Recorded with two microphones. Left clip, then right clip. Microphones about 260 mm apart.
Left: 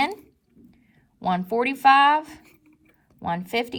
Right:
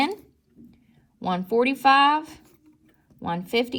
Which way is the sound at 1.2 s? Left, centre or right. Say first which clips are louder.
Right 1 dB; left.